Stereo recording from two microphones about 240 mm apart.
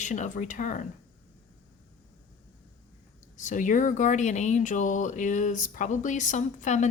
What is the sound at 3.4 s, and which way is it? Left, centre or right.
Speech, left.